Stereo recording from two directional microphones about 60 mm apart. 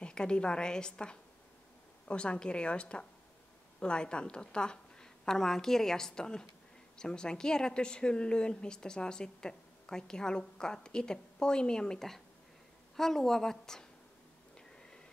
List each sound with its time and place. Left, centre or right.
0.0 s a woman's voice: centre